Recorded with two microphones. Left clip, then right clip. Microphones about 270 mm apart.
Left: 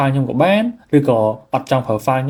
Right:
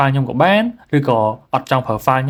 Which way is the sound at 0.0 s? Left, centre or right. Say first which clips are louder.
Right 1 dB; right.